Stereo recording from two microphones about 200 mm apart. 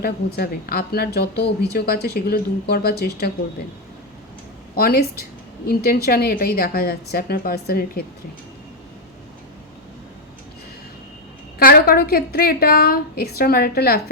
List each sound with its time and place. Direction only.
0.0 s a woman's voice: 50° left (ahead or behind)
4.7 s a woman's voice: 50° left (ahead or behind)
11.6 s a woman's voice: 50° left (ahead or behind)